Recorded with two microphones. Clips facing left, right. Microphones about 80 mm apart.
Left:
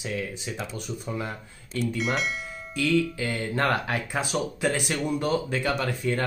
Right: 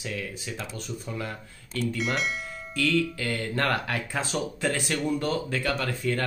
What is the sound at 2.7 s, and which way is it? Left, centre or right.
Speech, centre.